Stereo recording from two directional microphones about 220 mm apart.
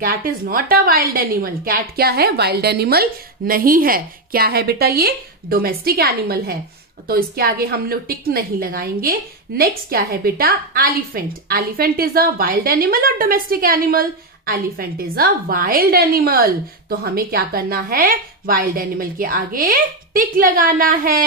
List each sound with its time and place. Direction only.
0.0 s a woman's voice: 40° right (ahead or behind)